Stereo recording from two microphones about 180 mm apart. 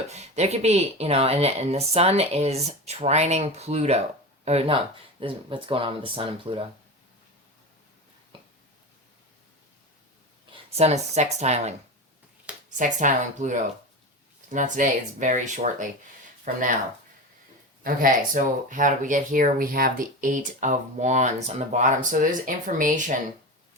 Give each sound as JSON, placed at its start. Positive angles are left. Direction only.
{"t": 0.1, "sound": "speech", "side_deg": -40}
{"t": 10.5, "sound": "speech", "side_deg": -35}
{"t": 12.7, "sound": "speech", "side_deg": -45}
{"t": 17.8, "sound": "speech", "side_deg": -50}